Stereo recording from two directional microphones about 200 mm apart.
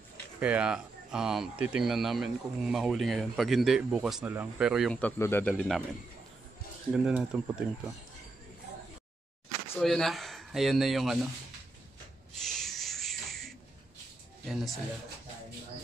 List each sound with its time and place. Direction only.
0.4 s speech: 5° right (ahead or behind)
6.9 s speech: 5° right (ahead or behind)
9.8 s speech: centre (ahead or behind)
12.4 s a sound: centre (ahead or behind)
14.4 s speech: centre (ahead or behind)